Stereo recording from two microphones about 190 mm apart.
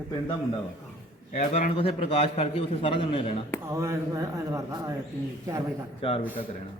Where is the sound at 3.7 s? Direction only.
15° right (ahead or behind).